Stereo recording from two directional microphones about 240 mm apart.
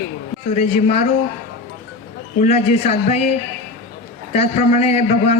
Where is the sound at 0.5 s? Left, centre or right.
Left.